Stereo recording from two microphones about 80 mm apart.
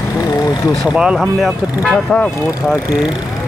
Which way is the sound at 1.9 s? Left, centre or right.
Centre.